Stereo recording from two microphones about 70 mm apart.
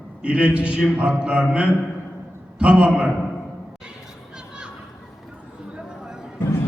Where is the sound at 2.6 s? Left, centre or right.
Centre.